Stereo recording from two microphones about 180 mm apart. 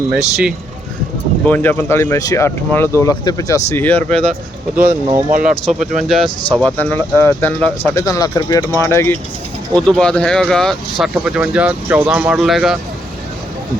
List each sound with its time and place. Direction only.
0.1 s speech: 5° right (ahead or behind)
1.5 s speech: 10° left (ahead or behind)
5.4 s speech: 5° right (ahead or behind); by 9.1 s 15° left (ahead or behind)
9.7 s speech: 5° left (ahead or behind)